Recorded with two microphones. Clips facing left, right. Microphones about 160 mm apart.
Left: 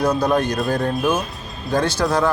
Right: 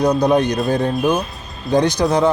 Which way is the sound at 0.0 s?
20° right (ahead or behind).